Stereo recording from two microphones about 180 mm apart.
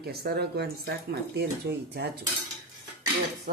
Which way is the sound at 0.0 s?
60° right (ahead or behind).